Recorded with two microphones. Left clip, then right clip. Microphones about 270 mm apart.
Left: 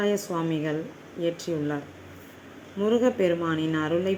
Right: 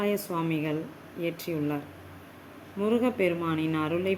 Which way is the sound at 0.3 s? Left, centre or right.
Centre.